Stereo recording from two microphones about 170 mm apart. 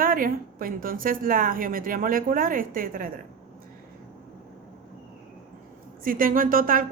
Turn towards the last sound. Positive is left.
turn(degrees=-55)  # may be behind; listen again after turning